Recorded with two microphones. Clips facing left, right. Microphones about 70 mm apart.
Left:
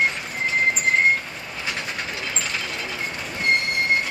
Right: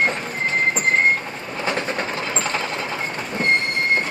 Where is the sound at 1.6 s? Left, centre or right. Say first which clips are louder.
Right 7 dB; right.